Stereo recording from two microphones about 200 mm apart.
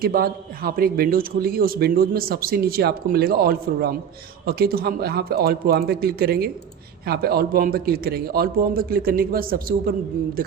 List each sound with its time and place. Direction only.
0.0 s a man's voice: 45° right (ahead or behind)